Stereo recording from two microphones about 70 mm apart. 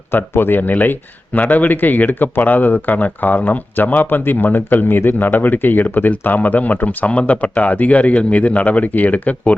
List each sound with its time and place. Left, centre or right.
0.1 s speech: left